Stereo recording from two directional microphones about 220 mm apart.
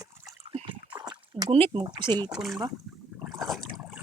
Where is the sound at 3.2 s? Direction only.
Centre (ahead or behind).